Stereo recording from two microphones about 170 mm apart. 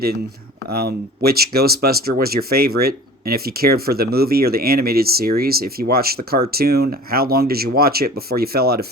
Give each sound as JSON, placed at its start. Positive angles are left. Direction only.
{"t": 0.7, "sound": "speech", "side_deg": -65}